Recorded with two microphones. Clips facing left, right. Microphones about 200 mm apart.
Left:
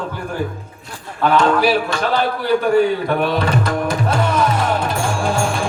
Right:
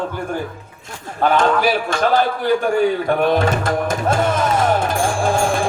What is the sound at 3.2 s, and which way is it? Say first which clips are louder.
Music: right 2 dB; 45° right (ahead or behind).